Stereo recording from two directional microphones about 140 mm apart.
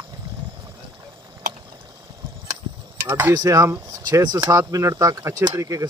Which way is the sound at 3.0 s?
15° right (ahead or behind).